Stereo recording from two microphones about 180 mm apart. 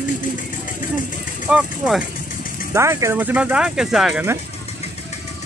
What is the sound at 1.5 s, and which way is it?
Speech, 5° right (ahead or behind).